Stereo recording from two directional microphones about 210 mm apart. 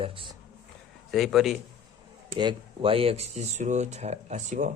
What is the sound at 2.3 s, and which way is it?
Speech, 25° right (ahead or behind).